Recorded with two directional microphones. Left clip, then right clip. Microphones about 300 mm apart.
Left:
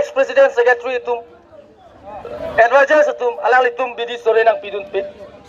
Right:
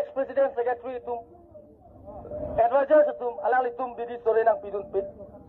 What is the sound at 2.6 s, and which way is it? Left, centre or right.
A man's voice, left.